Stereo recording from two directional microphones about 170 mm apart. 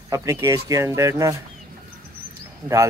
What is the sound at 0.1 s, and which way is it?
Speech, 15° right (ahead or behind).